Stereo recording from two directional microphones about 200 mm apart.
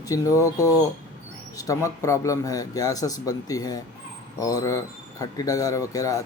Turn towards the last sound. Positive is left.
turn(degrees=15)  # may be behind; listen again after turning